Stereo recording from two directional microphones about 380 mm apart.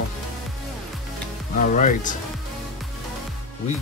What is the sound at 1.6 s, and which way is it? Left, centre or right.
Speech, centre.